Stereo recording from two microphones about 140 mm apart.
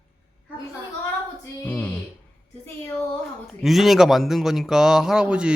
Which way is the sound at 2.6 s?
20° left (ahead or behind).